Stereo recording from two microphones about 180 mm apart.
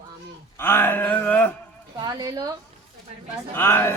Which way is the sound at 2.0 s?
20° right (ahead or behind).